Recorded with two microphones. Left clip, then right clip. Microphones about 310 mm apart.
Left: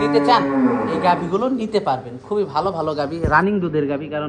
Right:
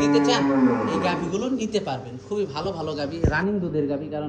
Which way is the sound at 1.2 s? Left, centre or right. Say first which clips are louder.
Left 7 dB; centre.